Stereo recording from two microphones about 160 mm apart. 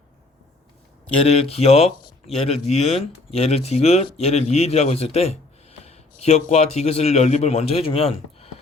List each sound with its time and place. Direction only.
1.2 s a man's voice: 40° left (ahead or behind)